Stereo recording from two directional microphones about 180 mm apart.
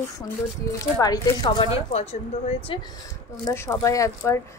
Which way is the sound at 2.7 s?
30° left (ahead or behind).